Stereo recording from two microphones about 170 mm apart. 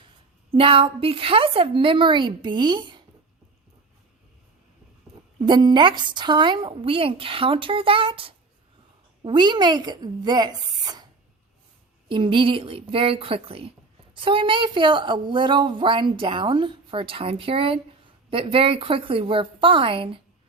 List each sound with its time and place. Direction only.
0.5 s a woman's voice: 30° right (ahead or behind)
5.5 s a woman's voice: 25° right (ahead or behind)